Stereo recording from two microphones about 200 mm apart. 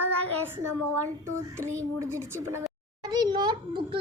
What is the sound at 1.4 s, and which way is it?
A woman's voice, 15° right (ahead or behind).